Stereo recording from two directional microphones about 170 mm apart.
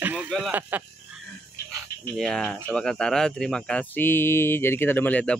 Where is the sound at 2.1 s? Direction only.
5° left (ahead or behind).